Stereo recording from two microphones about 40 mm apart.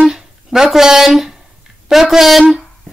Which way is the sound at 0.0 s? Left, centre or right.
Centre.